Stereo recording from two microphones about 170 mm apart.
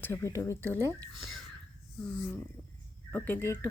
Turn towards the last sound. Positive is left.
turn(degrees=15)  # may be behind; listen again after turning